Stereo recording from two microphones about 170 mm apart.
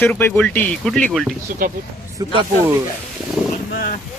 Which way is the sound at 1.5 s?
55° right (ahead or behind).